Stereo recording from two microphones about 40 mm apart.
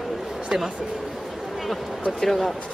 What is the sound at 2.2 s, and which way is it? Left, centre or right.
Speech, centre.